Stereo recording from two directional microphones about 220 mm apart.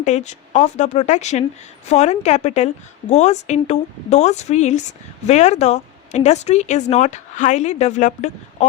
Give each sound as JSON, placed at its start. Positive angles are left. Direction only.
{"t": 0.0, "sound": "a woman's voice", "side_deg": 30}